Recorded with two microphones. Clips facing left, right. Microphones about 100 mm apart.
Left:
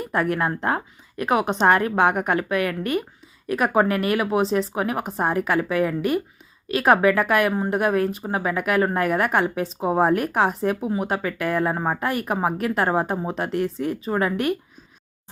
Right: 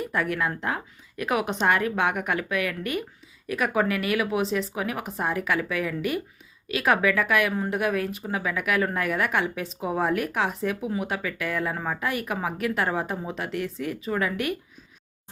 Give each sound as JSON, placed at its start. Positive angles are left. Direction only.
{"t": 0.0, "sound": "a woman's voice", "side_deg": 40}